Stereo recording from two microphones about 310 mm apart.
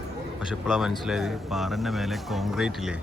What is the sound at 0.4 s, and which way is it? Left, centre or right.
Speech, centre.